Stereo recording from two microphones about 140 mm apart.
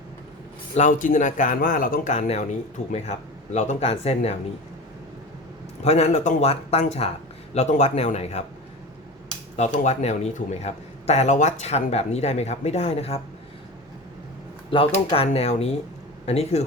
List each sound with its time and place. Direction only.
0.8 s speech: 65° left (ahead or behind); by 4.4 s 50° left (ahead or behind)
5.8 s speech: 50° left (ahead or behind)
9.6 s speech: 55° left (ahead or behind)
14.7 s speech: 40° left (ahead or behind)